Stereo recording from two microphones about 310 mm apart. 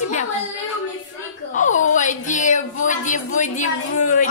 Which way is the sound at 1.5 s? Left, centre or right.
Left.